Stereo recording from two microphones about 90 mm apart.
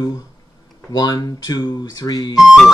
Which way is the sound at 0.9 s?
45° left (ahead or behind).